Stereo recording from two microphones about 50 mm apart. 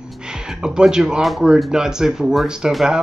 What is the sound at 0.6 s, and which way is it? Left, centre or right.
Speech, centre.